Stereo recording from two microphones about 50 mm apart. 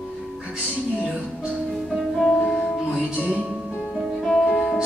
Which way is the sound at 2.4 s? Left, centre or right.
Centre.